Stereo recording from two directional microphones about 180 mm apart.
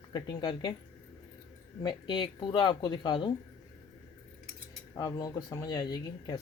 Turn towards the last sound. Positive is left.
turn(degrees=20)  # may be behind; listen again after turning